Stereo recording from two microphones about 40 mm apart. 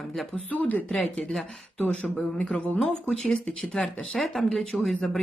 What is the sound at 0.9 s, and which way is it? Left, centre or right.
Speech, left.